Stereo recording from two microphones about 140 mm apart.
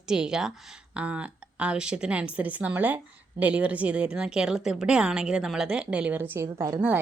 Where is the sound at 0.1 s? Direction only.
5° right (ahead or behind).